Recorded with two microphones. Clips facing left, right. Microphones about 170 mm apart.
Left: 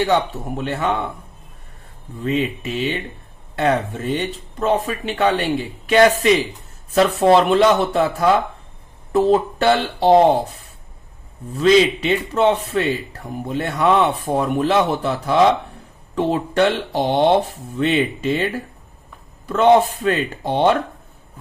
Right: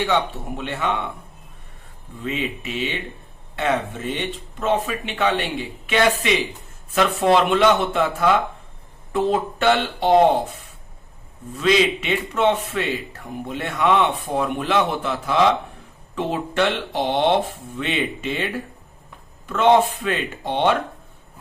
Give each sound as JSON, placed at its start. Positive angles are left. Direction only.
{"t": 0.0, "sound": "a man's voice", "side_deg": 40}
{"t": 2.2, "sound": "a man's voice", "side_deg": 40}
{"t": 11.5, "sound": "a man's voice", "side_deg": 35}